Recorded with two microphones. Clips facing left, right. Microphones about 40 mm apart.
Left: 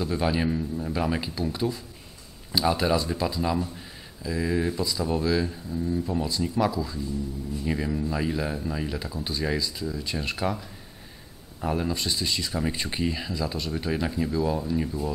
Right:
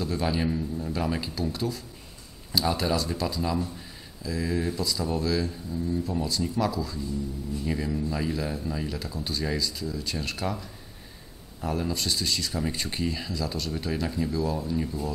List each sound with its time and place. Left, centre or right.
0.0 s speech: centre